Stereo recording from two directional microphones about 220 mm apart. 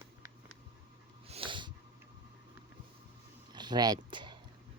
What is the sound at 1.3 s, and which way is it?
Dog, 25° right (ahead or behind).